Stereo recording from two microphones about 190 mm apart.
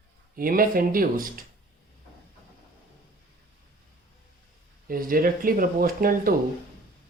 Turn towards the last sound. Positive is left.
turn(degrees=-50)  # may be behind; listen again after turning